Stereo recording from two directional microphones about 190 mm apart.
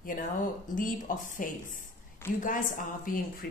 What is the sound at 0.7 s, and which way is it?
A woman's voice, 45° left (ahead or behind).